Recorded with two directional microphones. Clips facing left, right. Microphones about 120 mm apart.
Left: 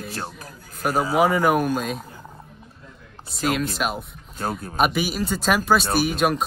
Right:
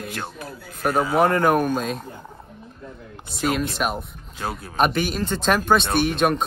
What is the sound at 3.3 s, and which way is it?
Speech, centre (ahead or behind).